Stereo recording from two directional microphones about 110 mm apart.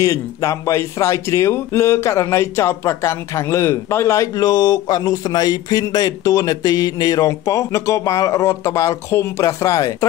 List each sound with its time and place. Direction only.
0.0 s speech: 30° left (ahead or behind)